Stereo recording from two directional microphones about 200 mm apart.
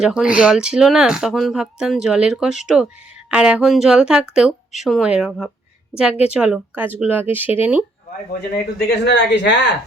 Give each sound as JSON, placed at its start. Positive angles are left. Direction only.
{"t": 0.0, "sound": "speech", "side_deg": -5}
{"t": 8.9, "sound": "speech", "side_deg": 60}